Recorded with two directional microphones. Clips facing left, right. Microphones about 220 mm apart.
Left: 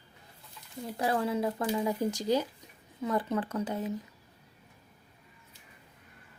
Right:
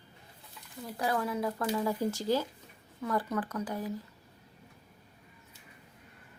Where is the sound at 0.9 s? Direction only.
25° left (ahead or behind).